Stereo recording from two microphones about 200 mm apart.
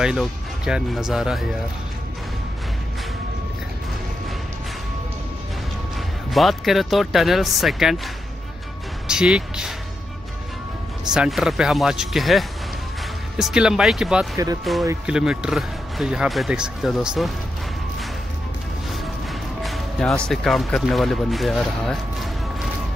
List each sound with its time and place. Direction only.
0.0 s speech: 5° right (ahead or behind)
5.9 s speech: centre (ahead or behind)
9.0 s music: 5° right (ahead or behind)
11.1 s speech: centre (ahead or behind)
14.3 s speech: 15° right (ahead or behind)
14.6 s speech: centre (ahead or behind)
19.6 s speech: centre (ahead or behind)